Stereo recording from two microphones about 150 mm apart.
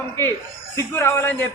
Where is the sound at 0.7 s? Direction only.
15° left (ahead or behind).